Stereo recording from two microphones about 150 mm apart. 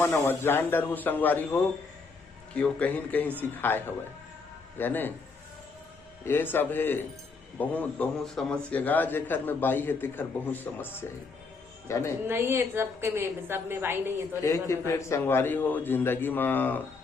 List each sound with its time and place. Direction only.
0.0 s a man's voice: 15° left (ahead or behind)
6.2 s a man's voice: 15° left (ahead or behind)
12.3 s a woman's voice: 15° right (ahead or behind)
14.4 s a man's voice: 20° left (ahead or behind)